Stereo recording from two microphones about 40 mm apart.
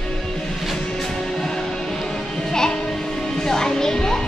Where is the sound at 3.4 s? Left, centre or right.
Centre.